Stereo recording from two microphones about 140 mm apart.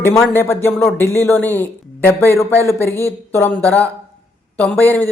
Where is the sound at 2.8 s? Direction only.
20° left (ahead or behind).